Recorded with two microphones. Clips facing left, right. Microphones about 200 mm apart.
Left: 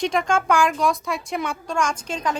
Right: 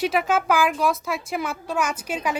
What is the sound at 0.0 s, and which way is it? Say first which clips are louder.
A woman's voice: even; 5° right (ahead or behind).